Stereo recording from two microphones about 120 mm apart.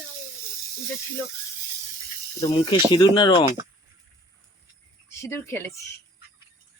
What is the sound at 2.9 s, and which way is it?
Speech, 40° left (ahead or behind).